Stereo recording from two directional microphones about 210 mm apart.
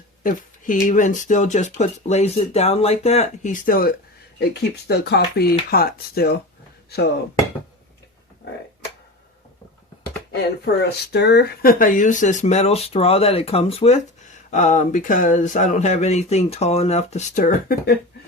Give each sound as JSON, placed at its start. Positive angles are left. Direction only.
{"t": 0.2, "sound": "speech", "side_deg": 40}
{"t": 10.3, "sound": "speech", "side_deg": 50}